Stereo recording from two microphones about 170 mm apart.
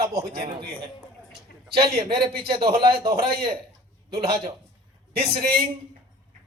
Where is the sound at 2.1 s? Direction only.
65° right (ahead or behind).